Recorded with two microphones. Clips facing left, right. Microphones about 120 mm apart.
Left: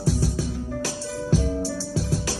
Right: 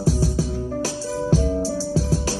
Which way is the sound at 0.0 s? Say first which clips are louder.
Right 3 dB; 30° right (ahead or behind).